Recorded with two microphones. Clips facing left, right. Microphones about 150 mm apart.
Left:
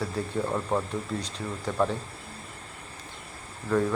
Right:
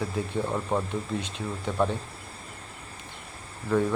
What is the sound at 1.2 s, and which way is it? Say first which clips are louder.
Speech: right 2 dB; 35° left (ahead or behind).